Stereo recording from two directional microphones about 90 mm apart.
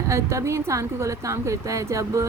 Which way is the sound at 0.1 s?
35° right (ahead or behind).